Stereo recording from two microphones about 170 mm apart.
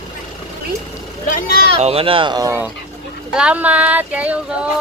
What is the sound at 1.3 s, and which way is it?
Speech, 55° left (ahead or behind).